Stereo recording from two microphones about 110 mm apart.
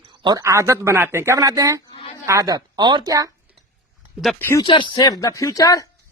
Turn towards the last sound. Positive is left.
turn(degrees=30)  # may be behind; listen again after turning